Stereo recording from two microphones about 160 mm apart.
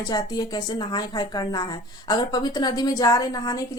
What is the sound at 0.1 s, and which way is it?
A woman's voice, 25° left (ahead or behind).